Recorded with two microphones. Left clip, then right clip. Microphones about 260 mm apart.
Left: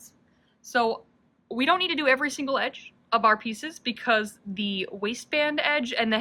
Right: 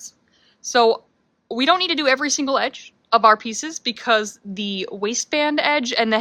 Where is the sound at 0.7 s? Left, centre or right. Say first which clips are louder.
Right 9 dB; right.